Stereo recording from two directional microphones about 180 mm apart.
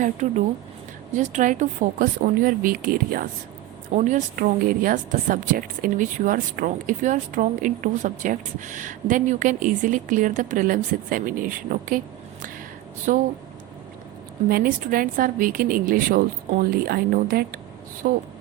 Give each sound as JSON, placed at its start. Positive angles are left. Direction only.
{"t": 0.0, "sound": "a woman's voice", "side_deg": -40}
{"t": 13.1, "sound": "a woman's voice", "side_deg": -50}
{"t": 14.5, "sound": "a woman's voice", "side_deg": -55}